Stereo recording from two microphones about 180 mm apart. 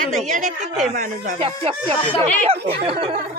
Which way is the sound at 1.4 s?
30° right (ahead or behind).